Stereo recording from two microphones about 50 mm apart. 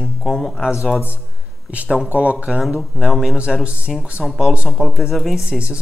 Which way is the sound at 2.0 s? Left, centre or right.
Right.